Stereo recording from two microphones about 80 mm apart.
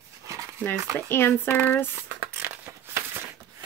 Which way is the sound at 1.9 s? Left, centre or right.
Right.